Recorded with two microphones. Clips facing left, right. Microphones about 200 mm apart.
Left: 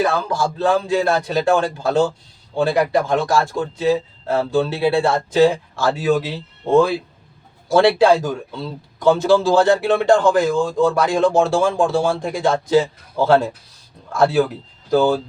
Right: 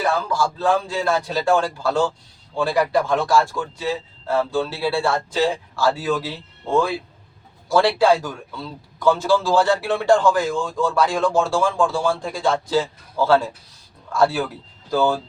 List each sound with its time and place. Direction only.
0.3 s a man's voice: 20° left (ahead or behind)